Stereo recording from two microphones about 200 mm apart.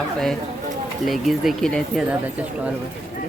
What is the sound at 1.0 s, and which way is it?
Speech, centre (ahead or behind).